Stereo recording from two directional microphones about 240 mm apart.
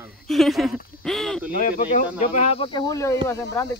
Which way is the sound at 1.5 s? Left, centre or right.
Left.